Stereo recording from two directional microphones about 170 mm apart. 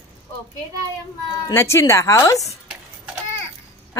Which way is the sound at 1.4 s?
15° left (ahead or behind).